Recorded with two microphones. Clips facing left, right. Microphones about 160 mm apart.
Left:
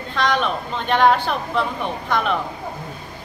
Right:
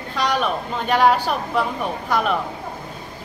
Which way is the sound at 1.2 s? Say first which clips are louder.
Right 1 dB; 10° right (ahead or behind).